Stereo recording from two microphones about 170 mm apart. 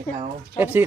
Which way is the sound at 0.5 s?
10° right (ahead or behind).